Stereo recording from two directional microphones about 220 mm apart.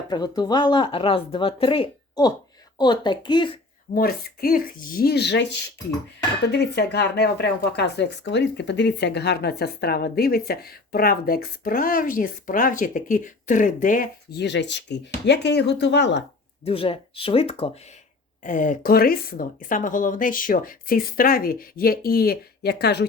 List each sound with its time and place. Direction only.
0.1 s speech: 20° left (ahead or behind)
3.9 s speech: 40° left (ahead or behind)
16.6 s speech: 25° left (ahead or behind); by 23.0 s 50° left (ahead or behind)